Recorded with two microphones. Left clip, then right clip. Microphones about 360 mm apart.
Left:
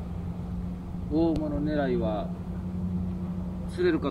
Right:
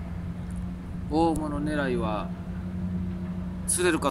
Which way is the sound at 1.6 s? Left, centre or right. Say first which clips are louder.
Even; centre.